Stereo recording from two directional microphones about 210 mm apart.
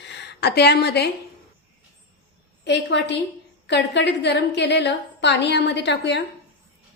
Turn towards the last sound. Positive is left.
turn(degrees=55)  # may be behind; listen again after turning